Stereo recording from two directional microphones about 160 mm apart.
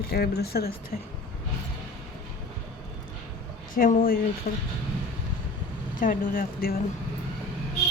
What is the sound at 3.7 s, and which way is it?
Speech, 60° left (ahead or behind).